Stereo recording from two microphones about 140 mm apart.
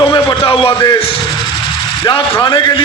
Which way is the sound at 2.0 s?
30° left (ahead or behind).